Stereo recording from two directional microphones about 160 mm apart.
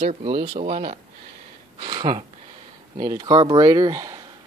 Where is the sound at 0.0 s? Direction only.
45° right (ahead or behind).